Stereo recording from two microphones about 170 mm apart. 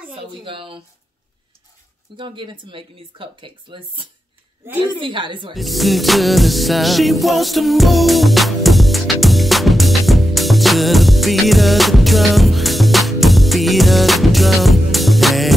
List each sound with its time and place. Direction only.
0.1 s speech: 30° right (ahead or behind)
2.1 s speech: 30° right (ahead or behind)
5.5 s music: centre (ahead or behind)